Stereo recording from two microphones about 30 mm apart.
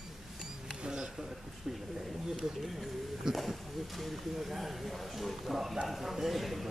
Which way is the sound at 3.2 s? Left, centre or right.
Centre.